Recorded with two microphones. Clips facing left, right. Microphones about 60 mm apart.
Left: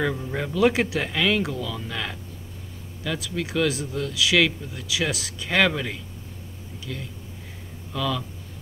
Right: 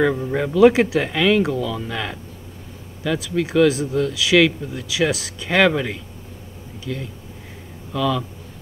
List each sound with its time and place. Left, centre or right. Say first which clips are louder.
0.1 s speech: right 7 dB; right
0.4 s speech: right 8 dB; centre